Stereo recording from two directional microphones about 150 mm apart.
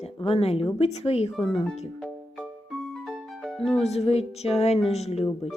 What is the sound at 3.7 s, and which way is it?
A woman's voice, 45° left (ahead or behind).